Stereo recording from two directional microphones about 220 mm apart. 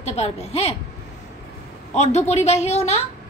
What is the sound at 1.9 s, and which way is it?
A woman's voice, 30° left (ahead or behind).